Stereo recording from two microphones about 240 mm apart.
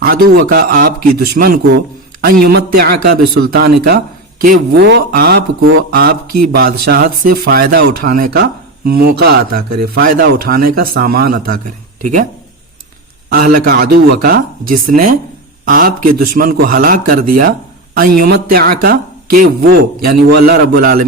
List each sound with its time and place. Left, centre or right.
0.0 s speech: right
5.5 s speech: right
5.9 s speech: right
13.3 s speech: right